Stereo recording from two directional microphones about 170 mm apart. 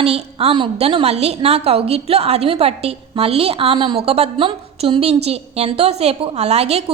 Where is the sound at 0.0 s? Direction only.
35° right (ahead or behind).